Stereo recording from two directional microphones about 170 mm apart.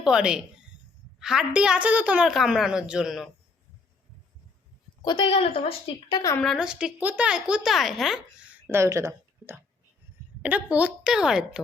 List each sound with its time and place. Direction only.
0.0 s a woman's voice: 5° right (ahead or behind)
5.0 s a woman's voice: 30° left (ahead or behind)
6.3 s a woman's voice: centre (ahead or behind)
8.7 s a woman's voice: 15° right (ahead or behind)